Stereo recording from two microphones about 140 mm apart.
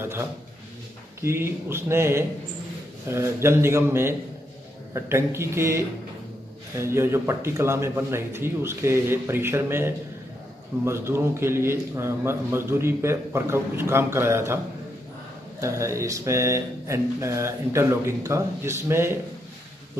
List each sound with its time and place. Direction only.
0.0 s speech: 15° right (ahead or behind)
15.6 s speech: 20° right (ahead or behind)